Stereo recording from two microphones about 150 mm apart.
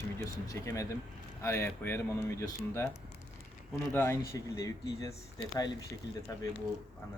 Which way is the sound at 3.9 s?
15° left (ahead or behind).